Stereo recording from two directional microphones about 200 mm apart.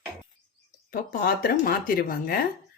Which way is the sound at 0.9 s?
45° left (ahead or behind).